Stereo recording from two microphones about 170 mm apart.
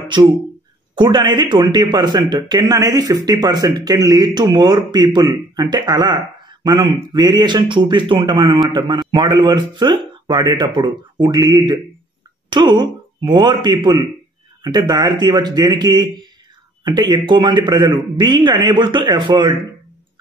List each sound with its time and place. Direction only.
0.9 s speech: 25° right (ahead or behind)